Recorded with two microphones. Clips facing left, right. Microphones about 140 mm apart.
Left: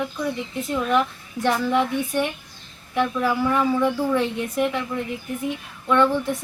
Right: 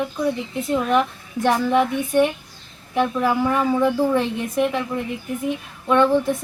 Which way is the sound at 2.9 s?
20° right (ahead or behind).